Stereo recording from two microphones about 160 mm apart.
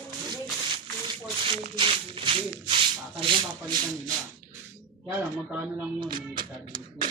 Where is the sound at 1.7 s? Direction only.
35° right (ahead or behind).